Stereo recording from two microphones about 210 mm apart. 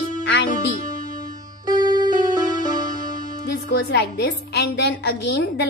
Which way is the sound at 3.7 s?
55° left (ahead or behind).